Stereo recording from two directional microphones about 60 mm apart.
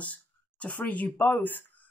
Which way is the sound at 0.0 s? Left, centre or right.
Left.